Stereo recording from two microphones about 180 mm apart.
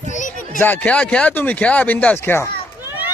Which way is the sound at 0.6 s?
10° left (ahead or behind).